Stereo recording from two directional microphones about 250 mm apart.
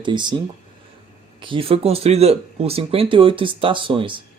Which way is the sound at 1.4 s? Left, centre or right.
Centre.